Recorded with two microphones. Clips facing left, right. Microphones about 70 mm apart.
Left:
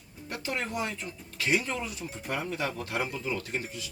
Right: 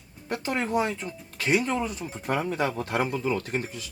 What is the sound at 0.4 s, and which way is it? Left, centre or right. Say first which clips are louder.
Speech: right 6 dB; right.